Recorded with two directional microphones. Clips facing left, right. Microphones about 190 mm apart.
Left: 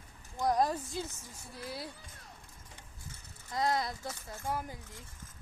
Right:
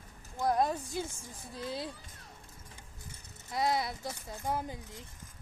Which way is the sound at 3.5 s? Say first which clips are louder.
Right 1 dB; 10° right (ahead or behind).